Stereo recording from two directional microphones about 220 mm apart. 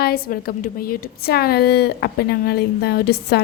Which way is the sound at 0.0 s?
45° left (ahead or behind).